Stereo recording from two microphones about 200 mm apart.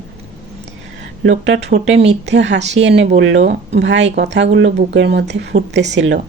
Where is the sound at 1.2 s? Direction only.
60° right (ahead or behind).